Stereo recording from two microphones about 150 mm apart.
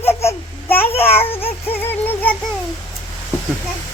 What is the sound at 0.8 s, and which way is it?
Child singing, 40° left (ahead or behind).